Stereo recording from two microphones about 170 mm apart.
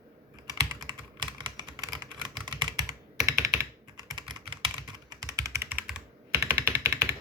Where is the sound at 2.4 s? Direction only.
25° right (ahead or behind).